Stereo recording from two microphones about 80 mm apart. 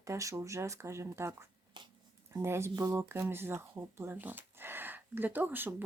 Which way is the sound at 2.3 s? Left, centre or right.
Right.